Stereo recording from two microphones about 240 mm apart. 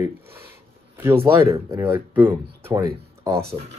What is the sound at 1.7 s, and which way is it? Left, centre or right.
Speech, centre.